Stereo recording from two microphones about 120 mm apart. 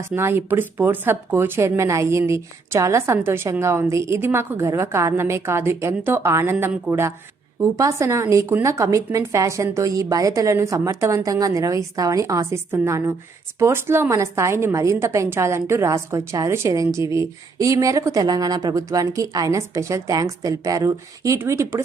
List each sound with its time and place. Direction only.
0.1 s a woman's voice: 20° right (ahead or behind)